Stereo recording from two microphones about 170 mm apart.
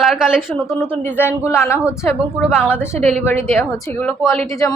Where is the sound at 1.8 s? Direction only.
5° right (ahead or behind).